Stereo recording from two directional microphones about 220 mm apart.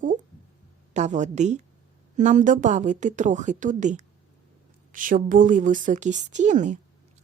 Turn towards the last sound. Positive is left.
turn(degrees=-35)  # may be behind; listen again after turning